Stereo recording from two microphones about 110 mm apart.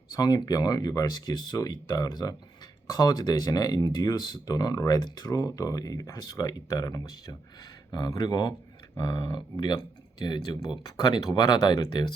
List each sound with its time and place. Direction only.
0.1 s speech: 40° left (ahead or behind)